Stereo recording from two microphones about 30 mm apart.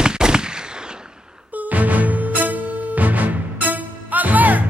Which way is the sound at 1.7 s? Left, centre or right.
Right.